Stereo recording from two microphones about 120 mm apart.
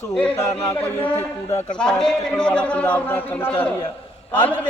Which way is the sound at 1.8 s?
5° left (ahead or behind).